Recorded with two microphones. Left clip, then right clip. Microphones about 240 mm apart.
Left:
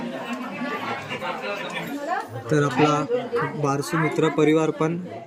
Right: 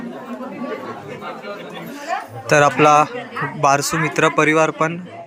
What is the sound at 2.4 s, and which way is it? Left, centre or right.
Speech, right.